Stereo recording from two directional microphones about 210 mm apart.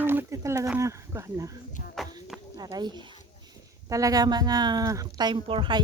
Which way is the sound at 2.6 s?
20° right (ahead or behind).